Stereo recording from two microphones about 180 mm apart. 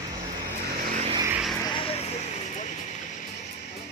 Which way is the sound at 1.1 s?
20° right (ahead or behind).